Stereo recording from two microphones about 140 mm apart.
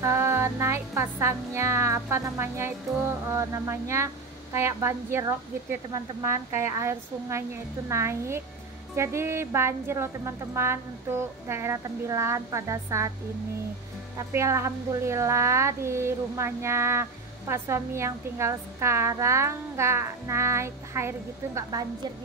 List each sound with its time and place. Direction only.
0.0 s a woman's voice: 20° right (ahead or behind)
14.3 s a woman's voice: 20° right (ahead or behind)